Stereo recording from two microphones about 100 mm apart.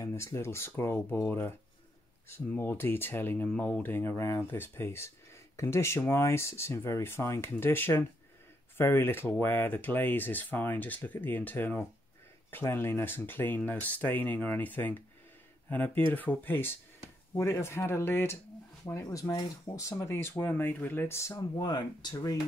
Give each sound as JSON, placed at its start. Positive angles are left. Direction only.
{"t": 0.0, "sound": "speech", "side_deg": 25}
{"t": 3.4, "sound": "speech", "side_deg": 10}
{"t": 19.0, "sound": "speech", "side_deg": 40}
{"t": 21.4, "sound": "speech", "side_deg": 40}